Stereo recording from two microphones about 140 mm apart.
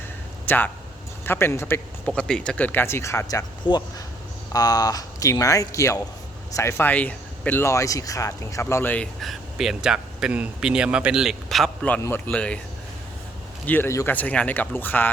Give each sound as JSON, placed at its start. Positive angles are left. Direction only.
{"t": 0.4, "sound": "speech", "side_deg": 15}
{"t": 9.2, "sound": "speech", "side_deg": 0}
{"t": 13.7, "sound": "speech", "side_deg": 15}